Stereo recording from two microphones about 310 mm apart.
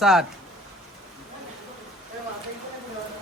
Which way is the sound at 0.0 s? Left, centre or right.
Centre.